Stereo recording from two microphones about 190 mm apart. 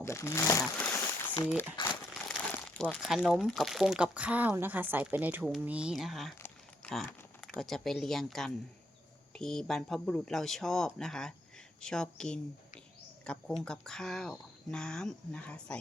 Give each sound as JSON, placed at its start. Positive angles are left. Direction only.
{"t": 0.0, "sound": "crumpling", "side_deg": 15}
{"t": 1.8, "sound": "crumpling", "side_deg": 25}
{"t": 2.7, "sound": "speech", "side_deg": 5}
{"t": 6.4, "sound": "a sound", "side_deg": 5}
{"t": 7.6, "sound": "speech", "side_deg": 0}